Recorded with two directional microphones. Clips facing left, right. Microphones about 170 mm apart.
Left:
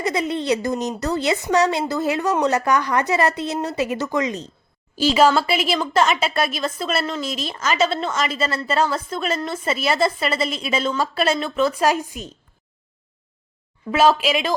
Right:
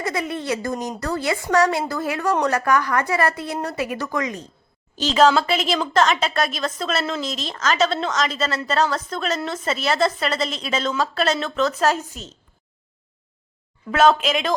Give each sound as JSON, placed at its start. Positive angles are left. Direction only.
{"t": 0.0, "sound": "a woman's voice", "side_deg": 20}
{"t": 4.9, "sound": "a woman's voice", "side_deg": 10}
{"t": 13.9, "sound": "a woman's voice", "side_deg": 5}